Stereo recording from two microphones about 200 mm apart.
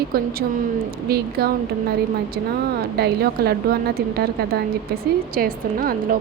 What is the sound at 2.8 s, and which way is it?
Speech, 50° right (ahead or behind).